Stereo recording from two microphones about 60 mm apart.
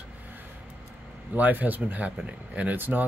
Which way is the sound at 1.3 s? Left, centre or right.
Right.